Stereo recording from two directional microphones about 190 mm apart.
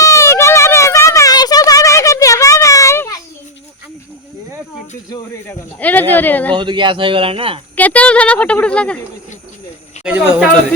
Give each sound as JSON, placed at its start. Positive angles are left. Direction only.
{"t": 0.0, "sound": "a sound", "side_deg": 15}
{"t": 5.1, "sound": "speech", "side_deg": 10}
{"t": 6.6, "sound": "speech", "side_deg": -25}
{"t": 7.8, "sound": "speech", "side_deg": 5}
{"t": 10.0, "sound": "speech", "side_deg": -10}